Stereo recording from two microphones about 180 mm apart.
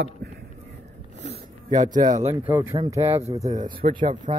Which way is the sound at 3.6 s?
45° right (ahead or behind).